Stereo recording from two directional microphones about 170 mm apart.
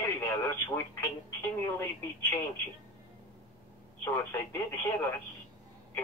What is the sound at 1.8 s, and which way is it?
Speech, 10° left (ahead or behind).